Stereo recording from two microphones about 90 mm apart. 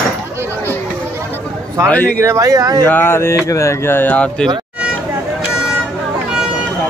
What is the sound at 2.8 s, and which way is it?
Speech, 25° left (ahead or behind).